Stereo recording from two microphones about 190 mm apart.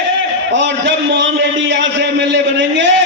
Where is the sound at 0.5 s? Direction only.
70° right (ahead or behind).